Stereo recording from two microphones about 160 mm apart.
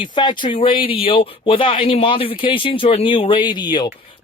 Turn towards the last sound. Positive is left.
turn(degrees=25)  # may be behind; listen again after turning